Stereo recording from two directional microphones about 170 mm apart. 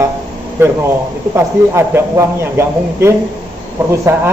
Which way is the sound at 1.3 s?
15° right (ahead or behind).